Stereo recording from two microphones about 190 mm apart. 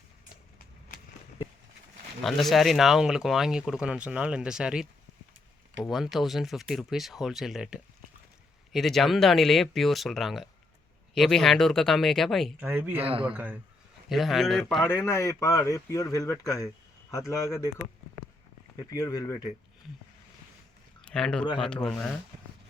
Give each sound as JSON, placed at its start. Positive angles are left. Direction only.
{"t": 2.2, "sound": "speech", "side_deg": 0}
{"t": 12.5, "sound": "speech", "side_deg": -10}
{"t": 13.1, "sound": "speech", "side_deg": -30}
{"t": 13.3, "sound": "speech", "side_deg": -10}
{"t": 14.8, "sound": "speech", "side_deg": 15}
{"t": 21.0, "sound": "speech", "side_deg": 5}